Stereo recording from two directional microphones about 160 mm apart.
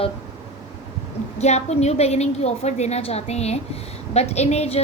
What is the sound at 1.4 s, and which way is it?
A woman's voice, 45° left (ahead or behind).